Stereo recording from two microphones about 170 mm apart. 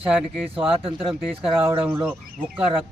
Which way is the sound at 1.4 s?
10° right (ahead or behind).